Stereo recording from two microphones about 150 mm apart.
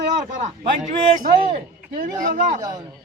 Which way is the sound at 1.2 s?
70° right (ahead or behind).